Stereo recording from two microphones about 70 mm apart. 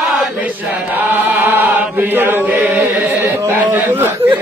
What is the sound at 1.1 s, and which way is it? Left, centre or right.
Chant, right.